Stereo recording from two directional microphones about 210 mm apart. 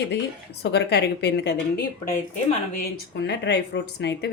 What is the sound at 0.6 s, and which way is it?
Speech, 50° left (ahead or behind).